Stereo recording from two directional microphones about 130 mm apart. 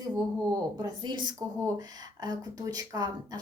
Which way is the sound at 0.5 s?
30° right (ahead or behind).